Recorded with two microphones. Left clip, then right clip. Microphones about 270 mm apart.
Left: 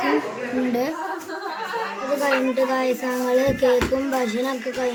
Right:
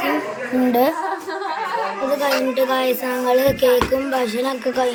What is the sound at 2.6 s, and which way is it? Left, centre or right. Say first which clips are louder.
Speech: right 3 dB; centre.